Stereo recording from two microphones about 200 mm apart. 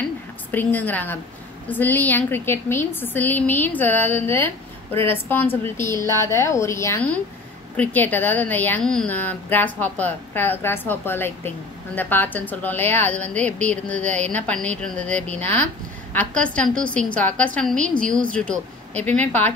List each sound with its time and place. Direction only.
0.5 s a woman's voice: 10° left (ahead or behind)